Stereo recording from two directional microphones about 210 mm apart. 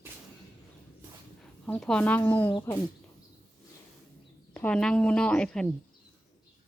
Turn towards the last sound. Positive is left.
turn(degrees=5)  # may be behind; listen again after turning